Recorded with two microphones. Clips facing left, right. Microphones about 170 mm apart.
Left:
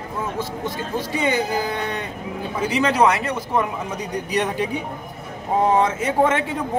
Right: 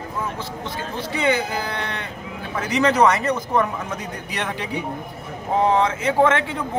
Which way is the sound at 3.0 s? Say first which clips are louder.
Right 1 dB; 10° left (ahead or behind).